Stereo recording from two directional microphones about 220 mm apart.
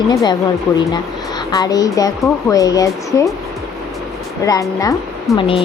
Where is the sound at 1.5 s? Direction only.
15° left (ahead or behind).